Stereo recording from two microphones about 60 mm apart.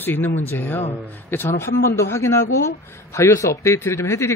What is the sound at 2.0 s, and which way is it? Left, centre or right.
A man's voice, left.